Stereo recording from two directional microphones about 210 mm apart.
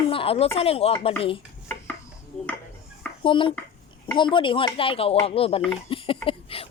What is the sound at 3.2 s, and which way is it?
A woman's voice, 25° left (ahead or behind).